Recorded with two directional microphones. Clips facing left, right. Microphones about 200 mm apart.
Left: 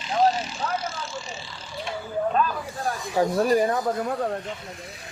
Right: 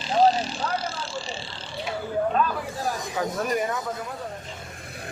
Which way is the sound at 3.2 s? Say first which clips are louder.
Left 7 dB; 30° left (ahead or behind).